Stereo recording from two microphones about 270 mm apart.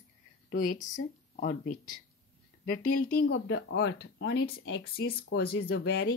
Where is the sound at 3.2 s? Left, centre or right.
Left.